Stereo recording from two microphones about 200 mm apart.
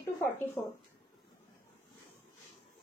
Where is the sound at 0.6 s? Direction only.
15° left (ahead or behind).